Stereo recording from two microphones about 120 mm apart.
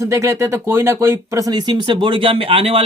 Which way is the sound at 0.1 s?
25° right (ahead or behind).